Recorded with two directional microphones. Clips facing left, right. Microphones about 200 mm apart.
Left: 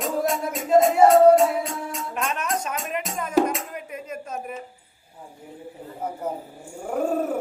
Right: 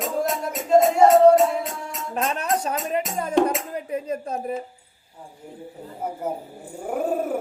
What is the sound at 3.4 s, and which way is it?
Music, 5° left (ahead or behind).